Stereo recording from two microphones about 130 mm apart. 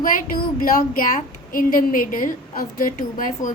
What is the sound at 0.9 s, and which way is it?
A woman's voice, 80° left.